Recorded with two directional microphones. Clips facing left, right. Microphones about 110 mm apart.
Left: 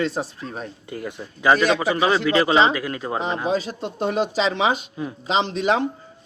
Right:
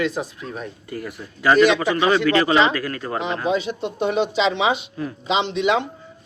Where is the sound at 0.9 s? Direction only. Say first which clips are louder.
Left 1 dB; 20° left (ahead or behind).